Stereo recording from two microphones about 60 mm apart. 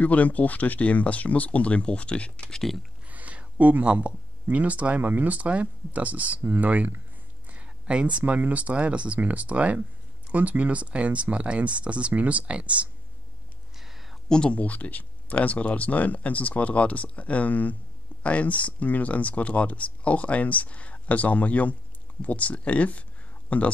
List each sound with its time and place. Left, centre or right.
0.0 s speech: left
3.1 s speech: right
14.3 s speech: centre